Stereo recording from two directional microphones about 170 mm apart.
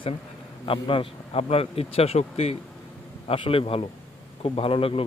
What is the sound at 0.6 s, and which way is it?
Speech, 30° left (ahead or behind).